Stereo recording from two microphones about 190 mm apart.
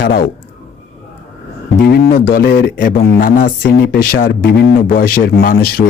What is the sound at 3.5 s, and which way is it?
A man's voice, 65° left (ahead or behind).